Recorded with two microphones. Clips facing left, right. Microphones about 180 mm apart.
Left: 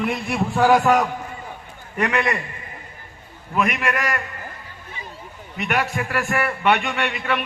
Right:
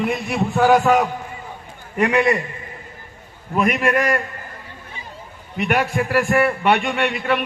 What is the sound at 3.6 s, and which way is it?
Speech, 45° right (ahead or behind).